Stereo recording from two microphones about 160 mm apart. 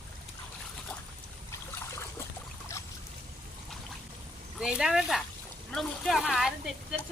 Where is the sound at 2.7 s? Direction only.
15° left (ahead or behind).